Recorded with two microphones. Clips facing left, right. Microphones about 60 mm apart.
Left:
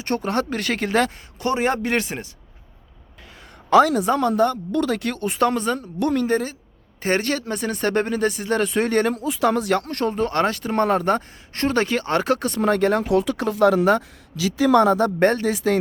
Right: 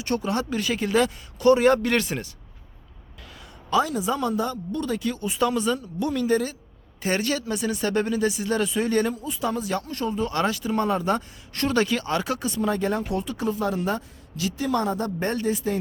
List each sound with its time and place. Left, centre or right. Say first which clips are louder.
0.0 s speech: left 3 dB; left
1.4 s a man's voice: right 4 dB; left
3.7 s speech: left 7 dB; left
4.7 s speech: left 4 dB; left
9.1 s speech: left 7 dB; left
11.5 s speech: left 2 dB; left